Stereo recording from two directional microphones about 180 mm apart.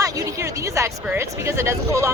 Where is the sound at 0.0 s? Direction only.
20° right (ahead or behind).